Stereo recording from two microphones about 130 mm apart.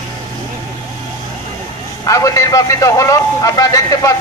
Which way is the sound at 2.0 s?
25° left (ahead or behind).